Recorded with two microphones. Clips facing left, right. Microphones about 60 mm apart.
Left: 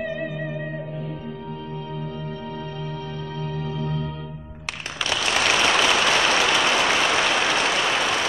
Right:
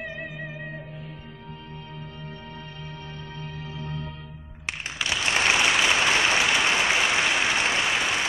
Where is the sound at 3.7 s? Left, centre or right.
Left.